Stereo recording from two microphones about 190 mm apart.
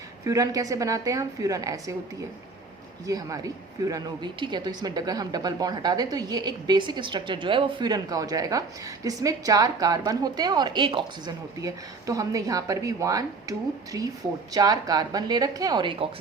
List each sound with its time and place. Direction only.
0.3 s a woman's voice: 20° right (ahead or behind)
3.1 s speech: 20° right (ahead or behind)